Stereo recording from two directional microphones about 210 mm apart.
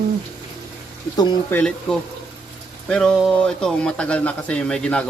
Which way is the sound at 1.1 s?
10° left (ahead or behind).